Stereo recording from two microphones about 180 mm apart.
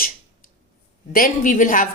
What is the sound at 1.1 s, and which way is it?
Speech, 50° left (ahead or behind).